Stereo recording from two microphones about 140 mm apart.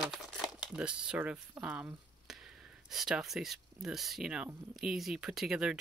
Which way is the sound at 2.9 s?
Centre (ahead or behind).